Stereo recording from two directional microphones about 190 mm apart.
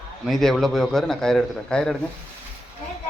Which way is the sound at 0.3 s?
Centre (ahead or behind).